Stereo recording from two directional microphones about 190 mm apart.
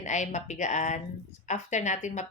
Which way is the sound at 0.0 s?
40° left (ahead or behind).